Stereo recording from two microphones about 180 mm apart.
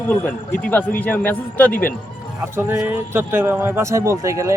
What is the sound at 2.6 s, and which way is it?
Speech, 10° right (ahead or behind).